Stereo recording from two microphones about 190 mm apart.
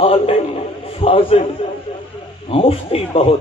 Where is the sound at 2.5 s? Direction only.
30° left (ahead or behind).